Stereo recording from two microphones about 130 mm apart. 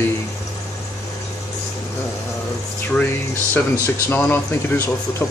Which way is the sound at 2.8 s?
15° left (ahead or behind).